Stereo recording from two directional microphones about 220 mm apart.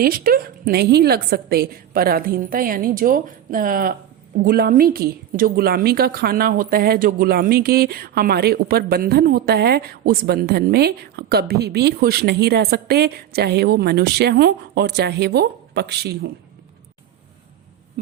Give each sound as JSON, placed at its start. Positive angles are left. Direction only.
{"t": 0.0, "sound": "a woman's voice", "side_deg": -40}